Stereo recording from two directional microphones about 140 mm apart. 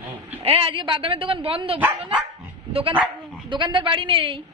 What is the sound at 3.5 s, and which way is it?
Speech, 35° right (ahead or behind).